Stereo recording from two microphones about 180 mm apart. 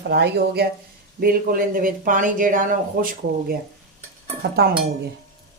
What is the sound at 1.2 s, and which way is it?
Speech, 55° right (ahead or behind).